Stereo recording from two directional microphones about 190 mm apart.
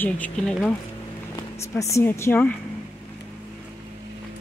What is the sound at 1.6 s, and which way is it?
Speech, 15° left (ahead or behind).